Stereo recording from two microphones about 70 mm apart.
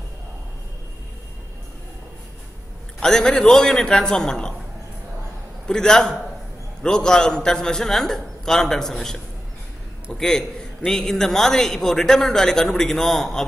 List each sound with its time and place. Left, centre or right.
3.0 s a man's voice: centre
5.7 s a man's voice: centre